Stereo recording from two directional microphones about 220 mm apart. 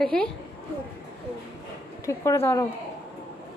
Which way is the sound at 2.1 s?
10° left (ahead or behind).